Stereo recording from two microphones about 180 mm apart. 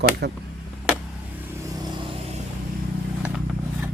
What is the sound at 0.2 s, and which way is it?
Speech, 65° right (ahead or behind).